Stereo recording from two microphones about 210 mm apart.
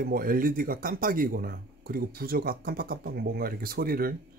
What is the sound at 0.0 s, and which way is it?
Speech, 45° right (ahead or behind).